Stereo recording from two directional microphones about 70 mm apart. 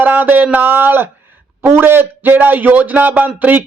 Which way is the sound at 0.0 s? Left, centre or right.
Right.